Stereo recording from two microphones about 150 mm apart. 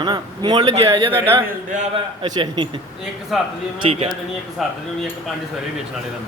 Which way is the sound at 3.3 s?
Centre (ahead or behind).